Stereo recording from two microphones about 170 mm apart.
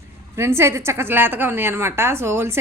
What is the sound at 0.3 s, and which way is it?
A woman's voice, 15° right (ahead or behind).